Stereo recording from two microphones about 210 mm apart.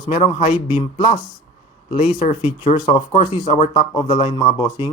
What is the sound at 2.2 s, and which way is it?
Speech, 35° left (ahead or behind).